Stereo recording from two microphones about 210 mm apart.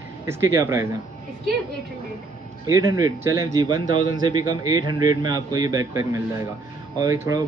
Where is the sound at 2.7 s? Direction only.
15° right (ahead or behind).